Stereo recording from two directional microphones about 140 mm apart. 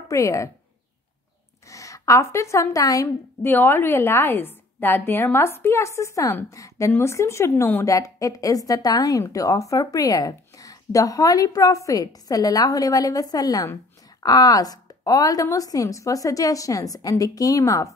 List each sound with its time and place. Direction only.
0.1 s speech: 20° left (ahead or behind)
1.7 s speech: 25° left (ahead or behind)